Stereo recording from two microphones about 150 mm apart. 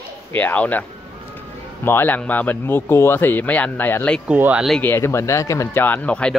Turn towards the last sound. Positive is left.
turn(degrees=5)  # may be behind; listen again after turning